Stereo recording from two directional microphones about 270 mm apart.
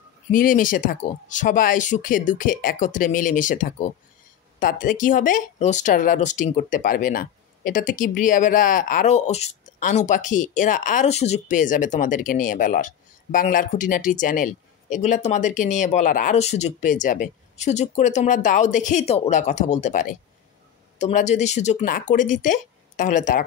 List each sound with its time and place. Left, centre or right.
0.3 s speech: left